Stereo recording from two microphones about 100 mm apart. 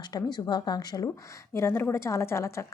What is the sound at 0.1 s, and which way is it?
A woman's voice, 45° left (ahead or behind).